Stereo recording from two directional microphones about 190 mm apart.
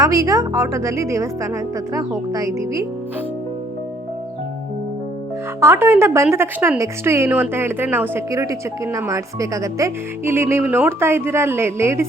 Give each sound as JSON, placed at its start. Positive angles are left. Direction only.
{"t": 0.0, "sound": "speech", "side_deg": -15}
{"t": 5.5, "sound": "speech", "side_deg": -10}